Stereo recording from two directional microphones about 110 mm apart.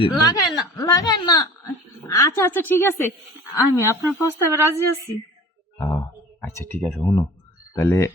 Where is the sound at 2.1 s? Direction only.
25° left (ahead or behind).